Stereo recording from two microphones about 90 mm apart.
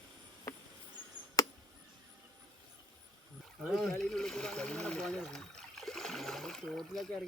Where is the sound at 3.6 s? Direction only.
Centre (ahead or behind).